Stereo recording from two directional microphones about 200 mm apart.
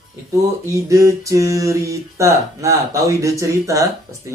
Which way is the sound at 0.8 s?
15° right (ahead or behind).